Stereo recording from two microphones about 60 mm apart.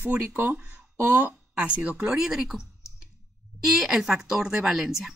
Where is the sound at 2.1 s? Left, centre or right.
Centre.